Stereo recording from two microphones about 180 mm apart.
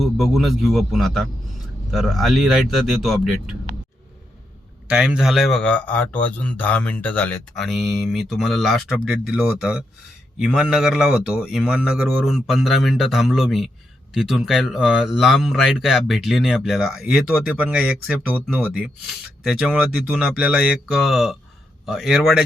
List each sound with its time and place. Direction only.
0.0 s a man's voice: centre (ahead or behind)
4.9 s a man's voice: 5° right (ahead or behind)